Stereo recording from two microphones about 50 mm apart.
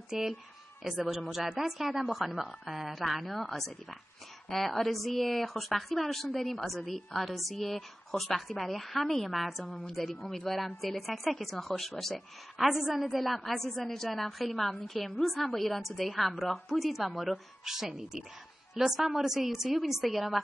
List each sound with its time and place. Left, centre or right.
0.1 s a woman's voice: centre